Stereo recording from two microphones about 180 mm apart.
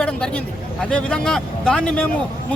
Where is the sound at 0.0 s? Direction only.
5° left (ahead or behind).